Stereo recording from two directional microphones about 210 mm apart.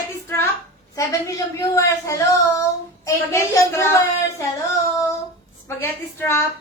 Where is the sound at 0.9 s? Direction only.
15° left (ahead or behind).